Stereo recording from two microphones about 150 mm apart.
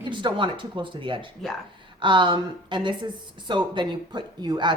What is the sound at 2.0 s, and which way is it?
Speech, 30° right (ahead or behind).